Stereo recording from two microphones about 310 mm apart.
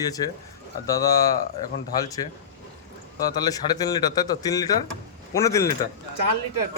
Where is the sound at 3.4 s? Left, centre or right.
Centre.